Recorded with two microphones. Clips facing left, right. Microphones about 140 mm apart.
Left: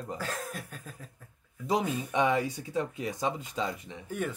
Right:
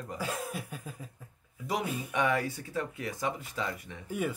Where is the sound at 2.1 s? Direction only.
20° left (ahead or behind).